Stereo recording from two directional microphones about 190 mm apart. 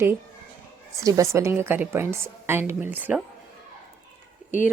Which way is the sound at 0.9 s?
15° right (ahead or behind).